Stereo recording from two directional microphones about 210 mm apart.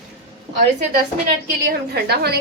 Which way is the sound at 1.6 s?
50° right (ahead or behind).